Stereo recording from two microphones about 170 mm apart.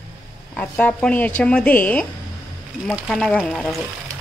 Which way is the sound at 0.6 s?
10° left (ahead or behind).